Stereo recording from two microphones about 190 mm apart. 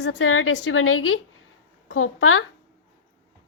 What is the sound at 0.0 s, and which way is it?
A woman's voice, 80° left.